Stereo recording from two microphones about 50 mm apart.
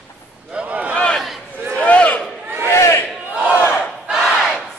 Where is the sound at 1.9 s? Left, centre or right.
Left.